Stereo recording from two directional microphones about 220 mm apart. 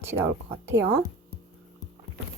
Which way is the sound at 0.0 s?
10° right (ahead or behind).